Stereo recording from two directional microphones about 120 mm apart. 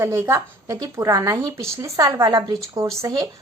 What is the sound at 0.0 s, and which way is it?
A woman's voice, 20° right (ahead or behind).